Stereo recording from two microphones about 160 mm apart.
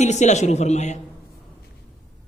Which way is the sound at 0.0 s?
45° left (ahead or behind).